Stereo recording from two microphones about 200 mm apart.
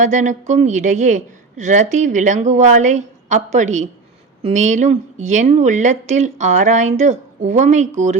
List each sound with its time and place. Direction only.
0.0 s a woman's voice: 35° right (ahead or behind)